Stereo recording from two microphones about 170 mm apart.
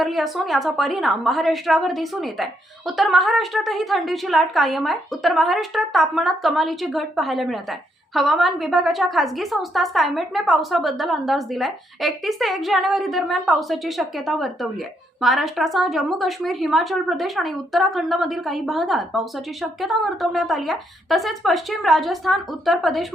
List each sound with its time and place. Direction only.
0.0 s a woman's voice: centre (ahead or behind)